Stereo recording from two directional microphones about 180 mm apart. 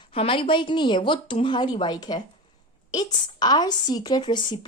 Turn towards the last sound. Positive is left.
turn(degrees=25)  # may be behind; listen again after turning